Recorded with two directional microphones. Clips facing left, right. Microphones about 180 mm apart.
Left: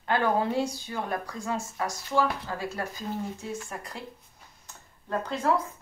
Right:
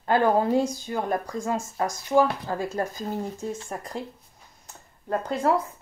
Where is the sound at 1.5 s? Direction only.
40° right (ahead or behind).